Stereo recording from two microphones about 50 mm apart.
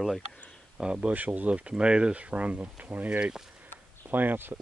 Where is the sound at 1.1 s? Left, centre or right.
Right.